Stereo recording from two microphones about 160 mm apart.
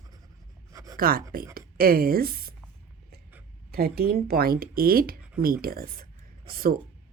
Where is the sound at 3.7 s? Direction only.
75° right (ahead or behind).